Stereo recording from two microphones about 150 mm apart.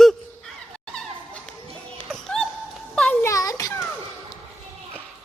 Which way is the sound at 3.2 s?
20° left (ahead or behind).